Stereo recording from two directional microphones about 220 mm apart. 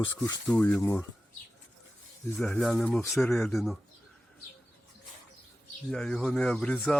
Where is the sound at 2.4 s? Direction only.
5° left (ahead or behind).